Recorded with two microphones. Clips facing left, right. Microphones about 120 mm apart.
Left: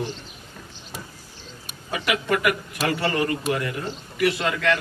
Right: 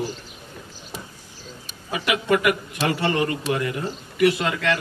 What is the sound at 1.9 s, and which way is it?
Speech, 20° right (ahead or behind).